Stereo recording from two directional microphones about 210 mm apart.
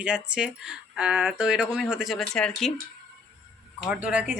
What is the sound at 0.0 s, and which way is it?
Speech, 5° right (ahead or behind).